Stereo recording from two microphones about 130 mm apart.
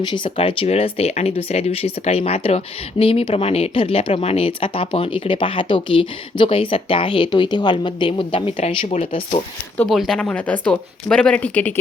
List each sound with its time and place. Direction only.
0.0 s speech: 35° left (ahead or behind)
0.3 s speech: 45° left (ahead or behind)
9.9 s speech: centre (ahead or behind)